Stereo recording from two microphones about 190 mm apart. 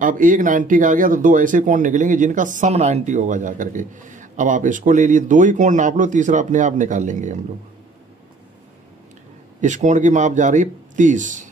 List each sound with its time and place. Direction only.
0.0 s speech: 45° right (ahead or behind)
9.6 s speech: 40° right (ahead or behind)